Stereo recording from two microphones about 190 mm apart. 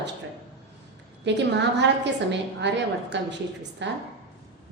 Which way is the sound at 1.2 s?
65° right (ahead or behind).